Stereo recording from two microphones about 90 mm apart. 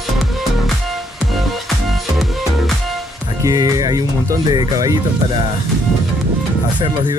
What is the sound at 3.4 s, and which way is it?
Speech, 40° right (ahead or behind).